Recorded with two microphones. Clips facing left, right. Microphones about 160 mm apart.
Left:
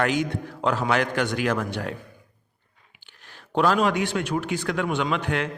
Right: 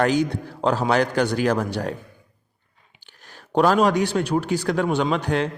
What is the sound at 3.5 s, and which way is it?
Speech, 40° right (ahead or behind).